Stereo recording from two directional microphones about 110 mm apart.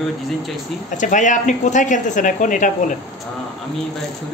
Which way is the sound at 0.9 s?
90° left.